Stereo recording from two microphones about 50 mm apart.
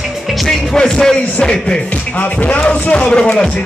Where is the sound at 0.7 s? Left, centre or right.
Centre.